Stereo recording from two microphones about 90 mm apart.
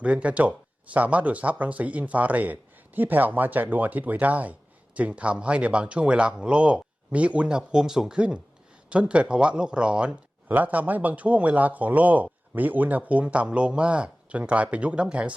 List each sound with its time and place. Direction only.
0.0 s speech: 15° right (ahead or behind)